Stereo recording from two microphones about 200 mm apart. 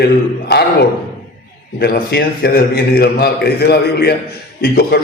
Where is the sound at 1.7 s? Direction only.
55° left (ahead or behind).